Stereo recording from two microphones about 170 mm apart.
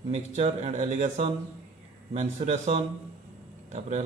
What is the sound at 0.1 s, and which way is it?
A man's voice, 40° right (ahead or behind).